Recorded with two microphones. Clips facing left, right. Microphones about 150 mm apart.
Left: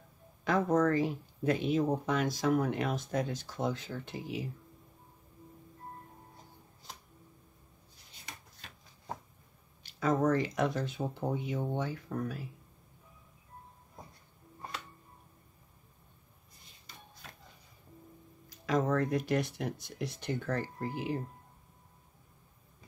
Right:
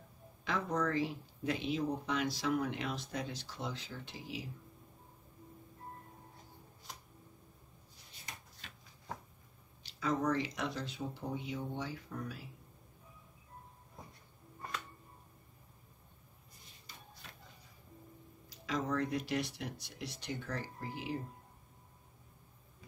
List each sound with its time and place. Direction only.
0.5 s speech: 45° left (ahead or behind)
9.8 s speech: 50° left (ahead or behind)
18.5 s speech: 50° left (ahead or behind)